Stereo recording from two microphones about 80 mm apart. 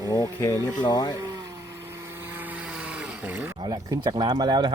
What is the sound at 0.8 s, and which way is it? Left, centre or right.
Speech, left.